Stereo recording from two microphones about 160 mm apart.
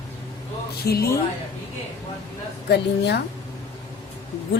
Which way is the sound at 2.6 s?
90° left.